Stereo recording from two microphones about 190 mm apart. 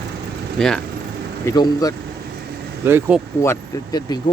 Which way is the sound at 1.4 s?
15° left (ahead or behind).